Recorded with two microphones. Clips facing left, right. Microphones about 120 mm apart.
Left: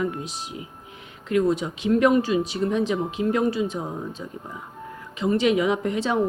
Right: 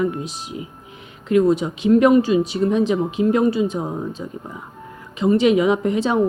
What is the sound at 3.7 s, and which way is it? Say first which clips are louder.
Speech: right 5 dB; 35° right (ahead or behind).